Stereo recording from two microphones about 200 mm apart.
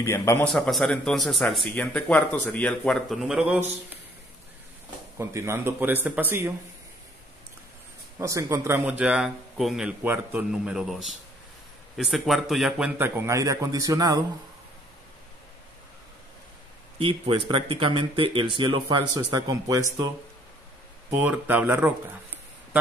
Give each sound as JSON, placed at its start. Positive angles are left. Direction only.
{"t": 0.0, "sound": "a man's voice", "side_deg": 15}
{"t": 5.1, "sound": "a man's voice", "side_deg": -15}
{"t": 8.2, "sound": "a man's voice", "side_deg": -15}
{"t": 17.0, "sound": "a man's voice", "side_deg": -25}
{"t": 21.1, "sound": "a man's voice", "side_deg": -10}